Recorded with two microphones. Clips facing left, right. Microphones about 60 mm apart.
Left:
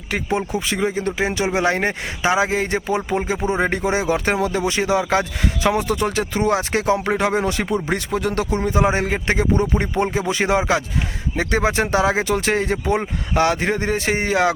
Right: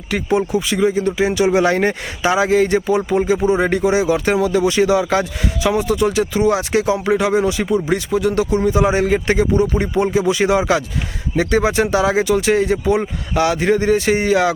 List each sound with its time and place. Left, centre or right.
0.1 s speech: left